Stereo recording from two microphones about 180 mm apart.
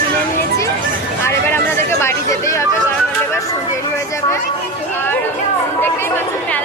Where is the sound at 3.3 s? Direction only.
15° left (ahead or behind).